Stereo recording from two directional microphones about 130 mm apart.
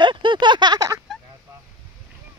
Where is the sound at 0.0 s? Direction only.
35° right (ahead or behind).